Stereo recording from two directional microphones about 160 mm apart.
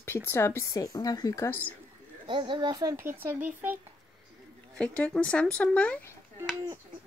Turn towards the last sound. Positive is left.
turn(degrees=5)  # may be behind; listen again after turning